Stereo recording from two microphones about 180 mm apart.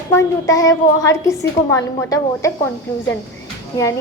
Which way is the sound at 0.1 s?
15° left (ahead or behind).